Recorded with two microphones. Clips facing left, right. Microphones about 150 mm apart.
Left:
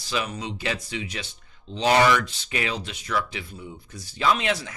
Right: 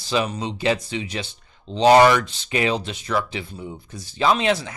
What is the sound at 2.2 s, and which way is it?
Speech, 25° right (ahead or behind).